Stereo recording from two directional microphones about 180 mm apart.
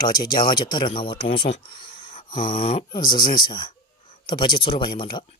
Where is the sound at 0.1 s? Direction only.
25° left (ahead or behind).